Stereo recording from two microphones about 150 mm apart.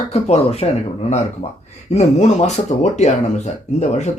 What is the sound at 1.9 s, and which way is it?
Speech, 50° left (ahead or behind).